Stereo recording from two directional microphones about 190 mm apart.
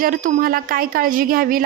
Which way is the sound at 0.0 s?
45° right (ahead or behind).